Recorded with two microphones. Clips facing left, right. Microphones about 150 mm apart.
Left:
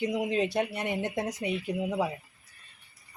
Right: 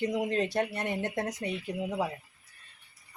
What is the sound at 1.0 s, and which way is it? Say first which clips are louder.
Speech: left 1 dB; centre (ahead or behind).